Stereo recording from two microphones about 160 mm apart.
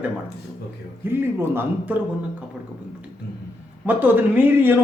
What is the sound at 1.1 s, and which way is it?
Speech, 15° right (ahead or behind).